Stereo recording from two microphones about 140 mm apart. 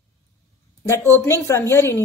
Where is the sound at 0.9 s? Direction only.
20° left (ahead or behind).